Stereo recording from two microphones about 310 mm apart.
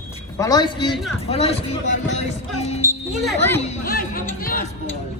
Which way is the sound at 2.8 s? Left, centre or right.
Centre.